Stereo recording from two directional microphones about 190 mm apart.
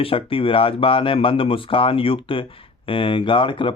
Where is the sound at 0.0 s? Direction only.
30° left (ahead or behind).